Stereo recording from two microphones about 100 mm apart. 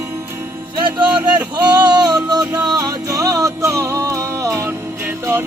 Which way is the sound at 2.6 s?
35° right (ahead or behind).